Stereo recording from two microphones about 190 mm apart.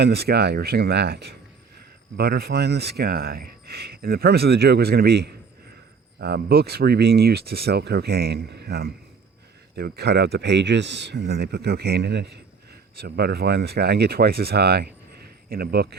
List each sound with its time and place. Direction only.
0.0 s speech: 60° right (ahead or behind)